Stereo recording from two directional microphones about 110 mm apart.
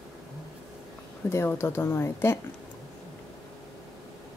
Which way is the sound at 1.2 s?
25° left (ahead or behind).